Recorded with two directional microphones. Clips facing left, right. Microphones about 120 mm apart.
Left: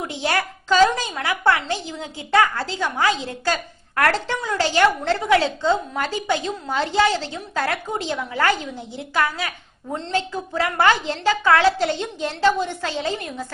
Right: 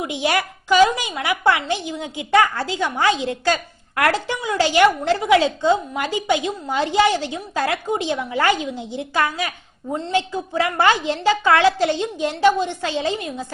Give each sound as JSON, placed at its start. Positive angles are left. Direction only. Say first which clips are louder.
{"t": 0.0, "sound": "a woman's voice", "louder": "right 2 dB", "side_deg": -15}